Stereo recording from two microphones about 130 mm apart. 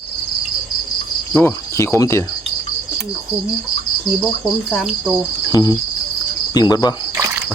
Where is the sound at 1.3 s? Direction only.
15° left (ahead or behind).